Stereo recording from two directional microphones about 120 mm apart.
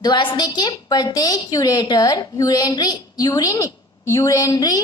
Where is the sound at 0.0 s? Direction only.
40° left (ahead or behind).